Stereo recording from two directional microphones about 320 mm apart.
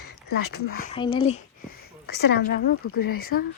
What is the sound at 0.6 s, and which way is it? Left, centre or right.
Speech, left.